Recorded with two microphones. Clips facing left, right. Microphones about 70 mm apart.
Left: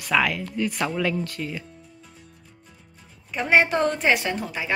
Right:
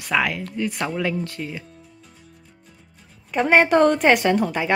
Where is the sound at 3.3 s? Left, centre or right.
Right.